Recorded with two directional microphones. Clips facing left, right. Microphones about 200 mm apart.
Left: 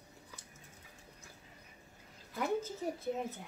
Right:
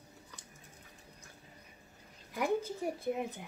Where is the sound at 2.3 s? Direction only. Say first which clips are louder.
Right 2 dB; 15° right (ahead or behind).